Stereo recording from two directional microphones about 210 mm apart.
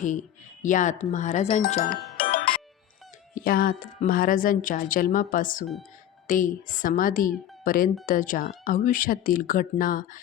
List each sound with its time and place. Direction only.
0.0 s a woman's voice: 35° left (ahead or behind)
3.3 s a woman's voice: 45° left (ahead or behind)